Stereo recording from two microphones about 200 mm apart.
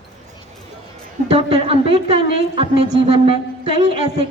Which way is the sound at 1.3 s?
30° right (ahead or behind).